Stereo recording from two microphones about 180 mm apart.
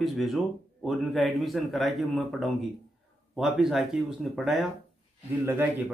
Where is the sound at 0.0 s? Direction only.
Centre (ahead or behind).